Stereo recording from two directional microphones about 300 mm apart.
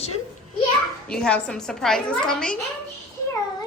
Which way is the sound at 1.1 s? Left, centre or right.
Centre.